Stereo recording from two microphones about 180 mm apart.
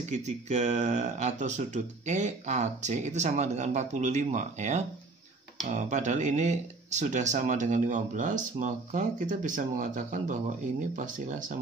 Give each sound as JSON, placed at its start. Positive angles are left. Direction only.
{"t": 0.1, "sound": "speech", "side_deg": -40}